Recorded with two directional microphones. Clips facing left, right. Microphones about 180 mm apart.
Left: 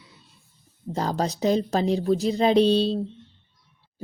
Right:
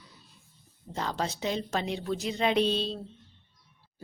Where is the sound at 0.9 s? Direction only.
40° left (ahead or behind).